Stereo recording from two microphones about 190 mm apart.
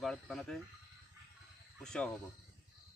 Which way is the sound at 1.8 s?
5° left (ahead or behind).